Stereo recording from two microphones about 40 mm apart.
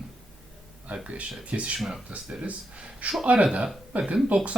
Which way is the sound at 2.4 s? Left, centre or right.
Right.